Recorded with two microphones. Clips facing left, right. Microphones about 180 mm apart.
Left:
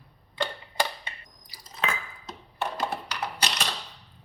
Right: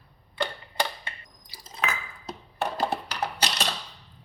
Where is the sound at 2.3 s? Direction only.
35° right (ahead or behind).